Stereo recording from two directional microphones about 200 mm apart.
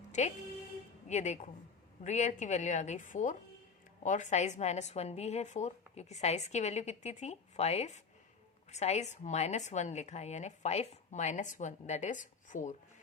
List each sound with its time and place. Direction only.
0.2 s a woman's voice: 35° left (ahead or behind)